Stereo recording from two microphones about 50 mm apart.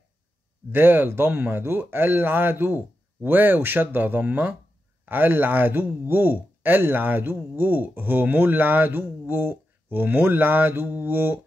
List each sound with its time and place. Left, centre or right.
0.7 s speech: right